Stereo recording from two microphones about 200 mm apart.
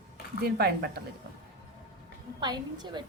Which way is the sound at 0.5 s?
50° right (ahead or behind).